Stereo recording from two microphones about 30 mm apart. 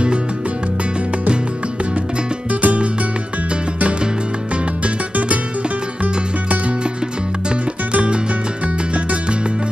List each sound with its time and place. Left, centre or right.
2.6 s music: right
4.8 s music: right
7.9 s music: right